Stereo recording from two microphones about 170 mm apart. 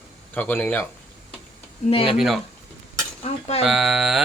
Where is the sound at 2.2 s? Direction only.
Centre (ahead or behind).